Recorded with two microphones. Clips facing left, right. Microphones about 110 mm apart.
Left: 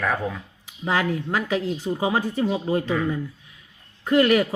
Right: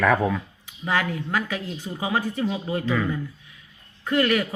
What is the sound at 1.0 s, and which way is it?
Speech, 35° left (ahead or behind).